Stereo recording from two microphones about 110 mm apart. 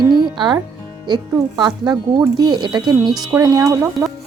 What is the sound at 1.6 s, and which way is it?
A woman's voice, 40° right (ahead or behind).